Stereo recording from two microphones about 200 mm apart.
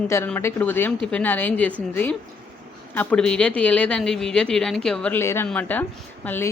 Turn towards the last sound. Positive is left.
turn(degrees=10)  # may be behind; listen again after turning